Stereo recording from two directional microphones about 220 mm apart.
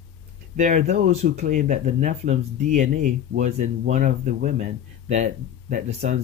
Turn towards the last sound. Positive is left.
turn(degrees=-35)  # may be behind; listen again after turning